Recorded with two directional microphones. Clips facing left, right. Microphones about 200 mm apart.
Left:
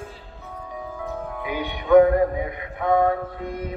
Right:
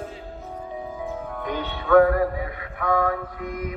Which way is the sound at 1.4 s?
10° left (ahead or behind).